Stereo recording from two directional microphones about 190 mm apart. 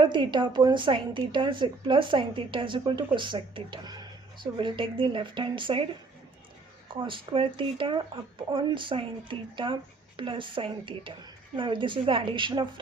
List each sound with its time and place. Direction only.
0.0 s a woman's voice: 25° right (ahead or behind)
6.9 s a woman's voice: 25° right (ahead or behind)